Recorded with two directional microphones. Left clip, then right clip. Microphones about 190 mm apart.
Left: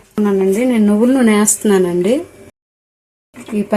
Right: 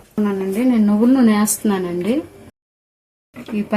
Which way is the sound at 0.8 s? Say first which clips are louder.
Left 2 dB; 35° left (ahead or behind).